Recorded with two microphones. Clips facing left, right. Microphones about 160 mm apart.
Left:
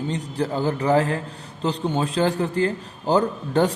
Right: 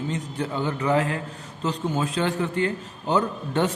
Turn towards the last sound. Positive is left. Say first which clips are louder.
# left 4 dB
turn(degrees=35)  # may be behind; listen again after turning